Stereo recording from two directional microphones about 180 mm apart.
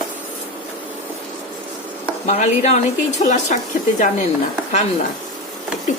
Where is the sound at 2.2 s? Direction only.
40° left (ahead or behind).